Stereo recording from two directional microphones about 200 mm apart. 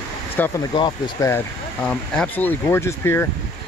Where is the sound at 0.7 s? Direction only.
20° left (ahead or behind).